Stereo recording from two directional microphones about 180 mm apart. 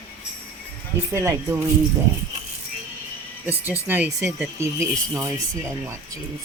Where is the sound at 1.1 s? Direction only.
15° right (ahead or behind).